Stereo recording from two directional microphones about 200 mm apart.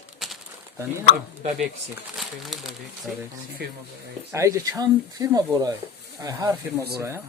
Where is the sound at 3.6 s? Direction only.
50° right (ahead or behind).